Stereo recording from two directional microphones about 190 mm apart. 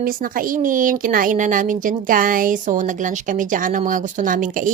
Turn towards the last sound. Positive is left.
turn(degrees=-45)  # may be behind; listen again after turning